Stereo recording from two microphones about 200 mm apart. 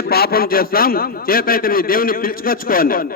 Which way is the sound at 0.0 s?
50° left (ahead or behind).